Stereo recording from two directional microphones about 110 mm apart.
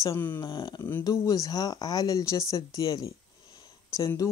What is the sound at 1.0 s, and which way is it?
Speech, 30° left (ahead or behind).